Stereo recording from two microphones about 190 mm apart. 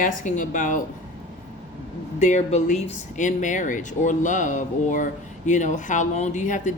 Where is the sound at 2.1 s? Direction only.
40° left (ahead or behind).